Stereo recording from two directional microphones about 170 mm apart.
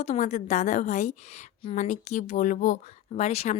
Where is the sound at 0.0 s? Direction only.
45° left (ahead or behind).